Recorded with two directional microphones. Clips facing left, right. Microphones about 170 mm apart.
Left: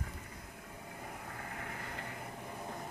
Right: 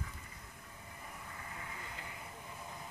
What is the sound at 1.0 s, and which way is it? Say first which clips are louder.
Vehicle: left 4 dB; 60° left (ahead or behind).